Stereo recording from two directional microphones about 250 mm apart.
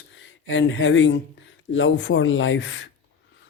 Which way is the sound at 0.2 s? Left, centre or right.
Left.